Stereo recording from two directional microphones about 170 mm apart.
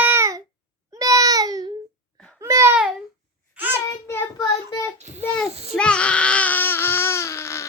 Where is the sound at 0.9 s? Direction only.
20° right (ahead or behind).